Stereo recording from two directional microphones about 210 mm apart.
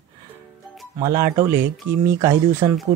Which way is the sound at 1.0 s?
15° right (ahead or behind).